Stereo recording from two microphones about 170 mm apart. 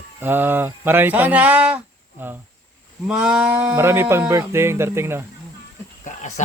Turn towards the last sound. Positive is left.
turn(degrees=45)  # may be behind; listen again after turning